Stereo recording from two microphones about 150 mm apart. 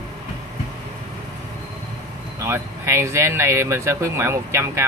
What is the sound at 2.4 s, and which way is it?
Speech, 15° right (ahead or behind).